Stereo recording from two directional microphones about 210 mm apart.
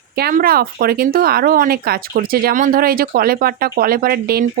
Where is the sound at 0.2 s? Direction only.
45° right (ahead or behind).